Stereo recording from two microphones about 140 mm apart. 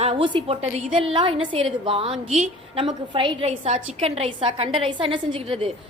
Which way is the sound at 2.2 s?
55° right (ahead or behind).